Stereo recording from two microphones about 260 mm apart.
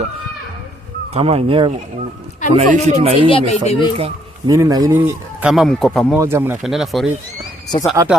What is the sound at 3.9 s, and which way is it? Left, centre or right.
Speech, centre.